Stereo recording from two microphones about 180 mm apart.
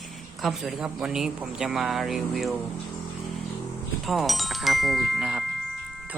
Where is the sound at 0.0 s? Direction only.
Centre (ahead or behind).